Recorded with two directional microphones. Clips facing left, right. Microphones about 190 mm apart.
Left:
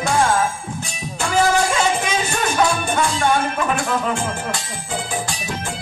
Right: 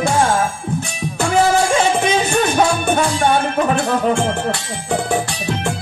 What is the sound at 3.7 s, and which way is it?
Music, 65° right (ahead or behind).